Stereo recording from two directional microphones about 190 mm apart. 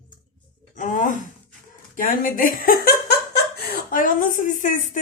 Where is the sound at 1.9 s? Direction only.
45° left (ahead or behind).